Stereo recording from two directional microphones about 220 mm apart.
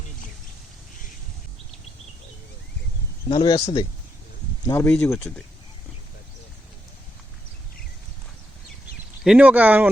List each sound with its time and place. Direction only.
3.2 s speech: 25° left (ahead or behind); by 5.3 s 5° left (ahead or behind)
9.2 s speech: 5° right (ahead or behind)